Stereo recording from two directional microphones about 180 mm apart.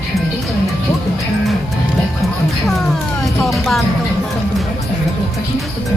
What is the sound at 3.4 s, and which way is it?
Music, centre (ahead or behind).